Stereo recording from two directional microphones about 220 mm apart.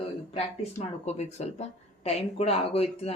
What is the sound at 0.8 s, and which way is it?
Speech, 30° left (ahead or behind).